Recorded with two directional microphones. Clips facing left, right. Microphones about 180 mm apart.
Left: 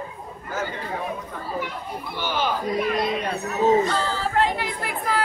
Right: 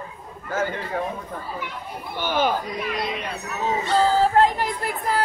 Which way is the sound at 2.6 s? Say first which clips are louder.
Left 5 dB; 50° left (ahead or behind).